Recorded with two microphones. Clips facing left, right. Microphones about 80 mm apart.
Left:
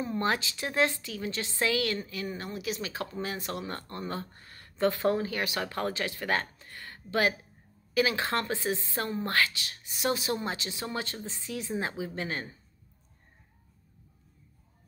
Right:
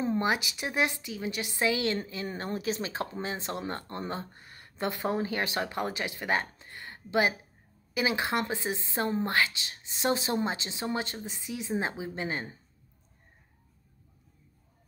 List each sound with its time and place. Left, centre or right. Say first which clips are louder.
0.0 s speech: right 1 dB; right